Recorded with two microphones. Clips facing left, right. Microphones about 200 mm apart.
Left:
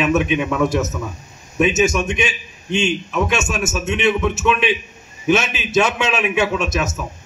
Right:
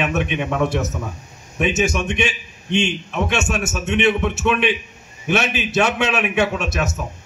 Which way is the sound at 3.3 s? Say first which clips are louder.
Left 1 dB; 60° right (ahead or behind).